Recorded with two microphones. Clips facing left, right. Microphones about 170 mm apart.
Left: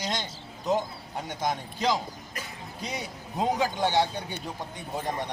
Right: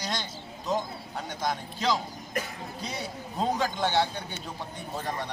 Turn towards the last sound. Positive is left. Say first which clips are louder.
# left 2 dB
turn(degrees=15)  # may be behind; listen again after turning